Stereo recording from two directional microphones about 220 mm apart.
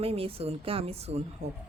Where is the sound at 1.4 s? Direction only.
50° right (ahead or behind).